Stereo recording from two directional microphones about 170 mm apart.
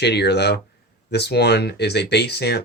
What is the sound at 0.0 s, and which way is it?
Speech, 80° left.